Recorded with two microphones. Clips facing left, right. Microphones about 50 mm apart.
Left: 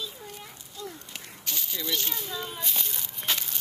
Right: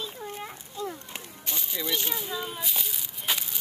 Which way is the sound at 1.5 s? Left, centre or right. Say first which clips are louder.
Right 1 dB; centre.